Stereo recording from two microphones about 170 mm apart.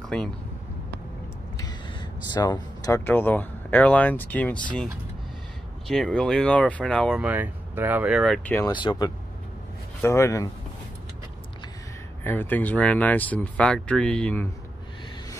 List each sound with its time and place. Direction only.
1.6 s speech: 25° left (ahead or behind); by 4.8 s 10° left (ahead or behind)
5.9 s speech: 5° left (ahead or behind)
7.2 s speech: 10° right (ahead or behind)
8.6 s speech: 25° left (ahead or behind)
12.2 s speech: 10° left (ahead or behind)